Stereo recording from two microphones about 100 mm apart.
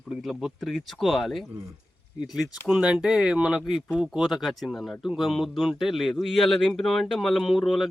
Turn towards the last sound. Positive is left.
turn(degrees=0)  # may be behind; listen again after turning